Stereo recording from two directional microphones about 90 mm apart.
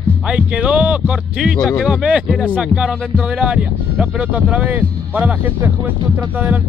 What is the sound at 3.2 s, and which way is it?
Speech, 10° right (ahead or behind).